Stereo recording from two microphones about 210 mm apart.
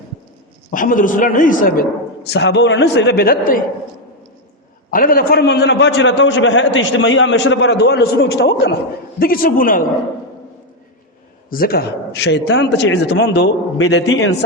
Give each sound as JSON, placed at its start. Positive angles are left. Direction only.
{"t": 0.7, "sound": "a man's voice", "side_deg": 40}
{"t": 2.3, "sound": "a man's voice", "side_deg": 55}
{"t": 4.9, "sound": "a man's voice", "side_deg": 40}
{"t": 11.4, "sound": "a man's voice", "side_deg": 45}
{"t": 13.7, "sound": "a man's voice", "side_deg": 70}